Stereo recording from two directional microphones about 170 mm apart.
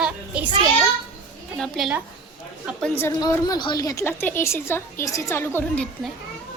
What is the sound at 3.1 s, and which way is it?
A woman's voice, 20° left (ahead or behind).